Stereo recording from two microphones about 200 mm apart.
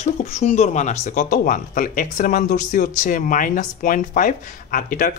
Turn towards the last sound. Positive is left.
turn(degrees=40)  # may be behind; listen again after turning